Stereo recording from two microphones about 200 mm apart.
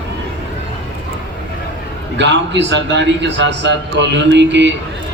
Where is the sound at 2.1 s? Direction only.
60° right (ahead or behind).